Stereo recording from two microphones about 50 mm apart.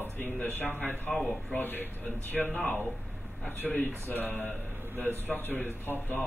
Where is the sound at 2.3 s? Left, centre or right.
Centre.